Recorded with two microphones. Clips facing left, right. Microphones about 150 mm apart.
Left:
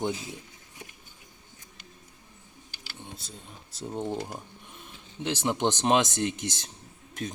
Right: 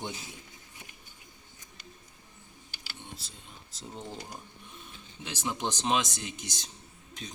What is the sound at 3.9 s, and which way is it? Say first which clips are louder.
Speech: left 10 dB; 60° left (ahead or behind).